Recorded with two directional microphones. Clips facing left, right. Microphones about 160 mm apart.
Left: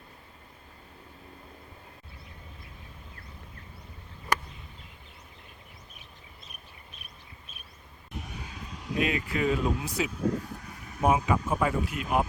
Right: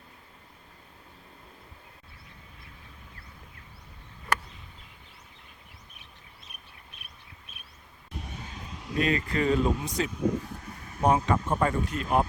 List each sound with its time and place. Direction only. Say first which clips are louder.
8.4 s vehicle: left 1 dB; 5° left (ahead or behind)
11.0 s speech: right 1 dB; 5° left (ahead or behind)